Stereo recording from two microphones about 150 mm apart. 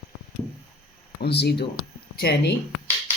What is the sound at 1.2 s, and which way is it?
Speech, 90° left.